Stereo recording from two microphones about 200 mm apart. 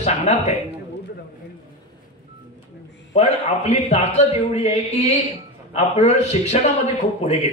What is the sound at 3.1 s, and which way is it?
A man's voice, 30° left (ahead or behind).